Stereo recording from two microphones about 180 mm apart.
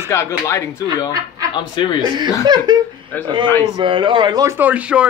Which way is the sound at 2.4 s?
20° right (ahead or behind).